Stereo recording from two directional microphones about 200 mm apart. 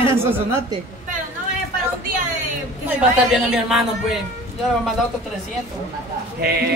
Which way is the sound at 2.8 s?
5° right (ahead or behind).